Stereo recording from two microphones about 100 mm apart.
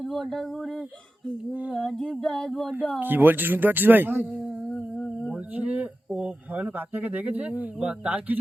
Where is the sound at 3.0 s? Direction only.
20° right (ahead or behind).